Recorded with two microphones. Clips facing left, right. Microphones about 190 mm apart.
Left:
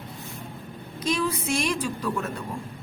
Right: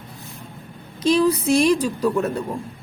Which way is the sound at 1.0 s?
35° right (ahead or behind).